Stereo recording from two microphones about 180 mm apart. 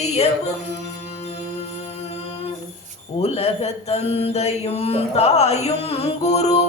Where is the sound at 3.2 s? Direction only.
35° left (ahead or behind).